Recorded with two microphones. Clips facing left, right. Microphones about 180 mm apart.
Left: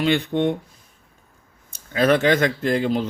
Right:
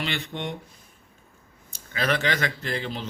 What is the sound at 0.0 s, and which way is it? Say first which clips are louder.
Speech: left 11 dB; 50° left (ahead or behind).